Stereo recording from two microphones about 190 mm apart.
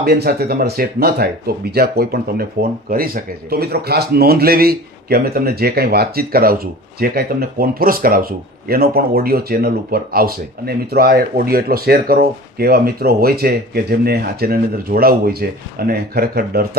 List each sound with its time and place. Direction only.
0.0 s a man's voice: 55° right (ahead or behind)